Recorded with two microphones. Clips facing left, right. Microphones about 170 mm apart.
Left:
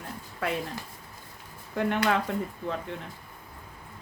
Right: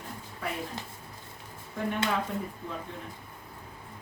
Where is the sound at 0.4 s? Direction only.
85° left.